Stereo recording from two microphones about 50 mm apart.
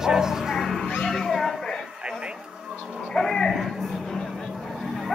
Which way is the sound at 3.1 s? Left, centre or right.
Centre.